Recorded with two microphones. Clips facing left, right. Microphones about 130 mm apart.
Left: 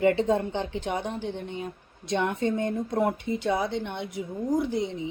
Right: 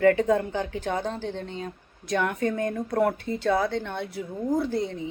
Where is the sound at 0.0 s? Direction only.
25° left (ahead or behind).